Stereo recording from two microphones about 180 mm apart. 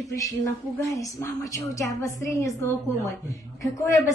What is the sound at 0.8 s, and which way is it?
A woman's voice, 20° left (ahead or behind).